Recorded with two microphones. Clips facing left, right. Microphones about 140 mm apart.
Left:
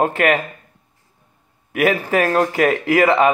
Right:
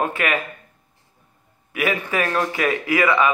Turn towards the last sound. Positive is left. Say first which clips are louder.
# left 4 dB
turn(degrees=40)  # may be behind; listen again after turning